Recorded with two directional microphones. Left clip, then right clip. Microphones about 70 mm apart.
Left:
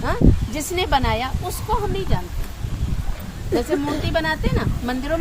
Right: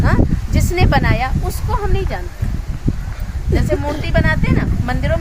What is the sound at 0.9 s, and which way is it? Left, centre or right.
Speech, right.